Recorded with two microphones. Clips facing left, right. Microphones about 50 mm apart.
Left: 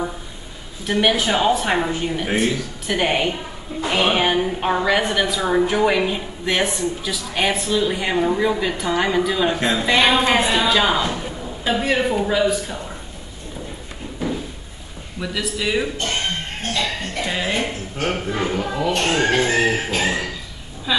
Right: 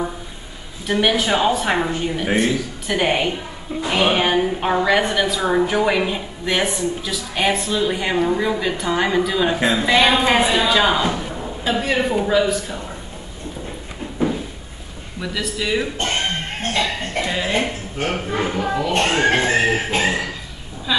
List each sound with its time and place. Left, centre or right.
1.0 s a woman's voice: centre
14.2 s a sound: right
15.1 s a woman's voice: centre
17.2 s a sound: right
17.9 s speech: centre
18.9 s speech: right
19.6 s chicken: right